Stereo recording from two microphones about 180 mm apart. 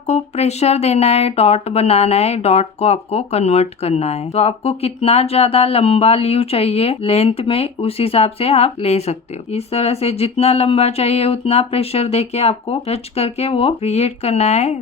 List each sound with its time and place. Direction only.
0.1 s speech: 35° left (ahead or behind)